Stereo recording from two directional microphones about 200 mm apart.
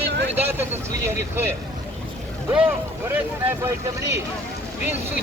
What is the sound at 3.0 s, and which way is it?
Speech, 10° right (ahead or behind).